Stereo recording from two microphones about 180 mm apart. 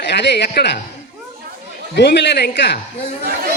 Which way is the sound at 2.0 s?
65° left (ahead or behind).